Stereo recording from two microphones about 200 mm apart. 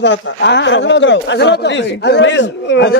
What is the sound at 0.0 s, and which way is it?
Speech, 60° left (ahead or behind).